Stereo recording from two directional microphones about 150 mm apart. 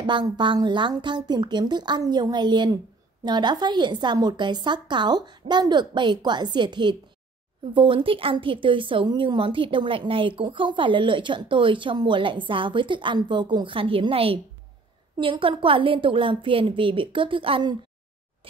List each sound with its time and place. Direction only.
0.0 s a woman's voice: 30° right (ahead or behind)